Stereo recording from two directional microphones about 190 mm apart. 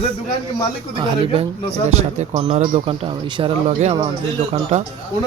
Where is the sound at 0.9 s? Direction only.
25° right (ahead or behind).